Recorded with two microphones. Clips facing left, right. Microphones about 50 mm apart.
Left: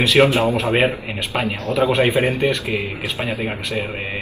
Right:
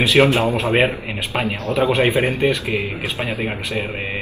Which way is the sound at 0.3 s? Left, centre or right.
Right.